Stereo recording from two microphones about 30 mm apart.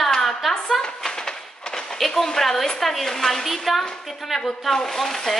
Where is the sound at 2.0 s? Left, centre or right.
Centre.